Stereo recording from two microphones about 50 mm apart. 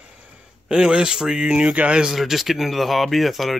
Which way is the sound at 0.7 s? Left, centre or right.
Centre.